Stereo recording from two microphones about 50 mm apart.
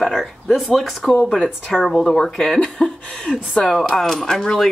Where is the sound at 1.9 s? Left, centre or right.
Centre.